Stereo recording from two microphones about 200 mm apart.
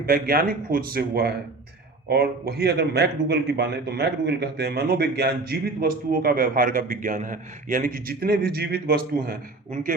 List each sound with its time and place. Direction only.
0.0 s a man's voice: 50° right (ahead or behind)